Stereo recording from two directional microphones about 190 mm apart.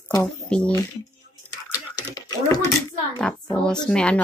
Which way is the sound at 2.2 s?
20° left (ahead or behind).